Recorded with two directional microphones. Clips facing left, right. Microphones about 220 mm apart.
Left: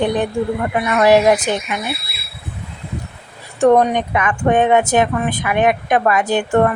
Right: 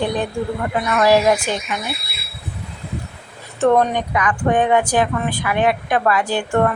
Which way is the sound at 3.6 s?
15° left (ahead or behind).